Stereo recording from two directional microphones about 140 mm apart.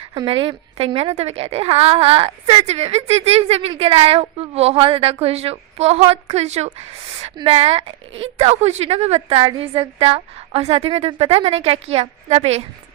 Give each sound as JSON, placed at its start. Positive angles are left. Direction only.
{"t": 0.3, "sound": "a woman's voice", "side_deg": -40}